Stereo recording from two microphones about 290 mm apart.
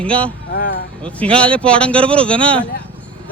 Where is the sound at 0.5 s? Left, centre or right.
Left.